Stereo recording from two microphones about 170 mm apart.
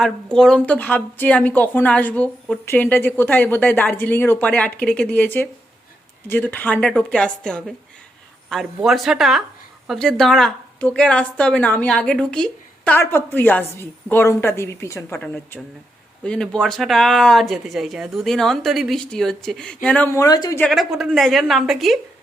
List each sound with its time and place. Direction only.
0.0 s a woman's voice: 5° left (ahead or behind); by 20.6 s 20° left (ahead or behind)
20.6 s speech: centre (ahead or behind)